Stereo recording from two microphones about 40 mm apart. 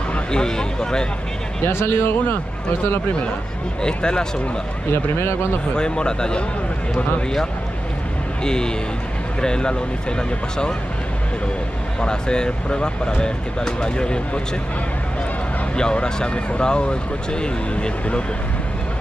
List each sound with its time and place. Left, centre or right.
0.1 s speech: centre
1.7 s speech: left
3.8 s speech: left
5.8 s speech: left
8.5 s speech: centre
12.0 s speech: left
15.7 s speech: left